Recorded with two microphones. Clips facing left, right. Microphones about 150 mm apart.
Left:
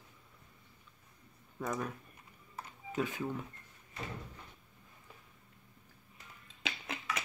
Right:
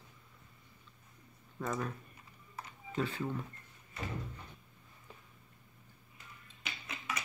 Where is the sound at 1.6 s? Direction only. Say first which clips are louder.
Even; centre (ahead or behind).